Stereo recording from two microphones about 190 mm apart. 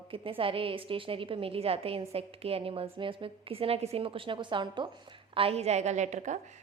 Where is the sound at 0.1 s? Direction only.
30° right (ahead or behind).